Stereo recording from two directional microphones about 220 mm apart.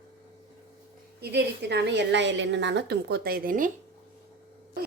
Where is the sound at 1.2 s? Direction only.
45° right (ahead or behind).